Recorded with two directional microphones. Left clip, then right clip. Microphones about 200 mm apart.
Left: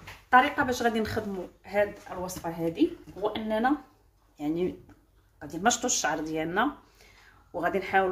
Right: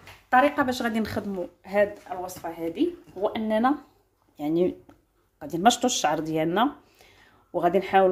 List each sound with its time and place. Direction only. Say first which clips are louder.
0.3 s speech: right 1 dB; 30° right (ahead or behind)